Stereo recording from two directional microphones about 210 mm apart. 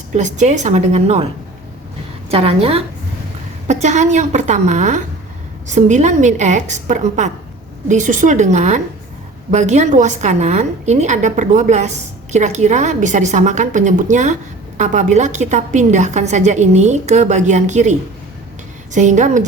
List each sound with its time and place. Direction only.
0.1 s a woman's voice: 35° right (ahead or behind)
2.3 s a woman's voice: 25° right (ahead or behind)
18.9 s a woman's voice: 35° right (ahead or behind)